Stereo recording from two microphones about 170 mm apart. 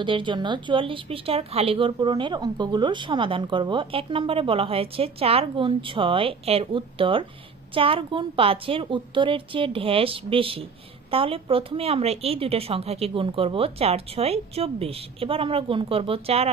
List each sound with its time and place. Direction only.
0.0 s a woman's voice: 30° right (ahead or behind)